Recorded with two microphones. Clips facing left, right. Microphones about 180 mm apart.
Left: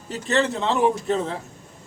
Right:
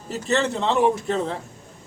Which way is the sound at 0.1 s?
Centre (ahead or behind).